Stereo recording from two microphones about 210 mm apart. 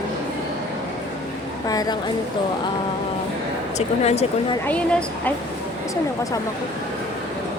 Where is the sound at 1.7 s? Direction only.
20° left (ahead or behind).